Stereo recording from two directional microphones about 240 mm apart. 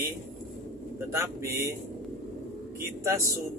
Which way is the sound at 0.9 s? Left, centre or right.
Centre.